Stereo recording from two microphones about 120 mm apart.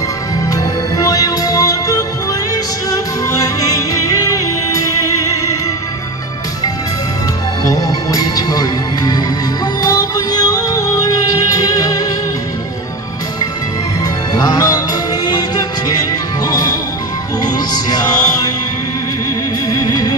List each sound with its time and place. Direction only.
0.5 s music: 30° left (ahead or behind)
7.6 s music: 30° left (ahead or behind)
14.4 s music: 35° left (ahead or behind)
19.7 s music: 35° left (ahead or behind)